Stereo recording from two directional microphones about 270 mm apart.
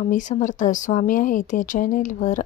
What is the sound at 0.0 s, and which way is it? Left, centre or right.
A woman's voice, left.